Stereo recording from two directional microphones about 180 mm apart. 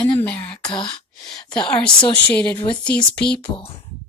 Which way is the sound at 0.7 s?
25° left (ahead or behind).